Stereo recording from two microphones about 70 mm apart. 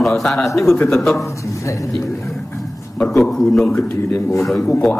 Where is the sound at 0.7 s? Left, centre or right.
Left.